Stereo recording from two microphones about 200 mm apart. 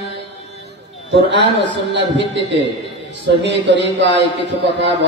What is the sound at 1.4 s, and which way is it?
Speech, 65° right (ahead or behind).